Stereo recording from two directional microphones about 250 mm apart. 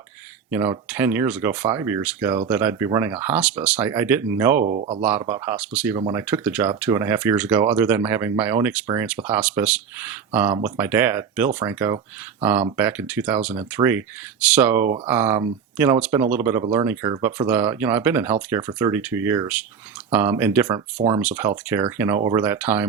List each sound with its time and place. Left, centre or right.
0.9 s speech: centre
4.6 s speech: right
5.0 s speech: centre
20.7 s speech: right
21.2 s speech: centre